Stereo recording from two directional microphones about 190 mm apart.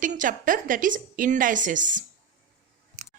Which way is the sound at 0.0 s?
45° right (ahead or behind).